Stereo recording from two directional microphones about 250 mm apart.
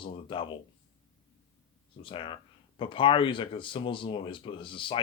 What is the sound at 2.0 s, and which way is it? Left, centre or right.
Speech, left.